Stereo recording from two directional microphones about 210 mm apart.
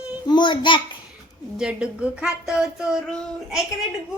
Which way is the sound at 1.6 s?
5° right (ahead or behind).